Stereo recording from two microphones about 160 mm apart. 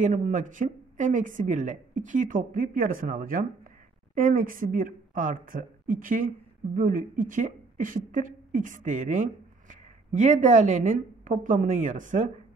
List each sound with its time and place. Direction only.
0.0 s speech: 45° right (ahead or behind)